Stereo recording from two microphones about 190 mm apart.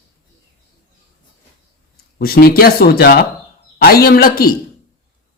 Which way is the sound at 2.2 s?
55° left (ahead or behind).